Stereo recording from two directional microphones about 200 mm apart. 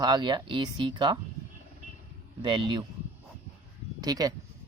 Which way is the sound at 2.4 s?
25° right (ahead or behind).